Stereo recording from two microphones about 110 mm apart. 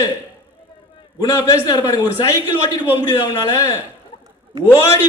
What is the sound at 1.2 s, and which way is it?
Speech, 35° left (ahead or behind).